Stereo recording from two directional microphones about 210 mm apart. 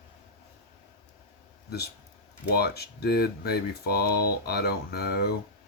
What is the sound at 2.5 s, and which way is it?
Speech, 50° left (ahead or behind).